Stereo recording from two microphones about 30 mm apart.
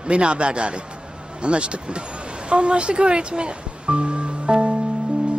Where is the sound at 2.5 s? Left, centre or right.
Right.